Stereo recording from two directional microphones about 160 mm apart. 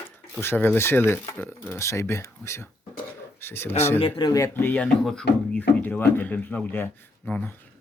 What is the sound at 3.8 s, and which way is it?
Speech, 15° left (ahead or behind).